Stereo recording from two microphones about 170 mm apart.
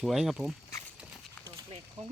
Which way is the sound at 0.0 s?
Centre (ahead or behind).